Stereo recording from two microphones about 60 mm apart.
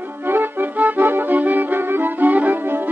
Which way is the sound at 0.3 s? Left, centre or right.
Right.